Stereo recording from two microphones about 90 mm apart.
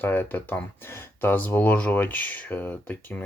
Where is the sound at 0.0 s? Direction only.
20° left (ahead or behind).